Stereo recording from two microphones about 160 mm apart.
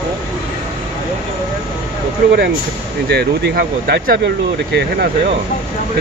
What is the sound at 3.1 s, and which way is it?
Speech, 90° right.